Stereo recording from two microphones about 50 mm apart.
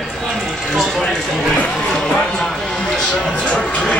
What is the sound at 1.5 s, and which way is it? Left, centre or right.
Music, left.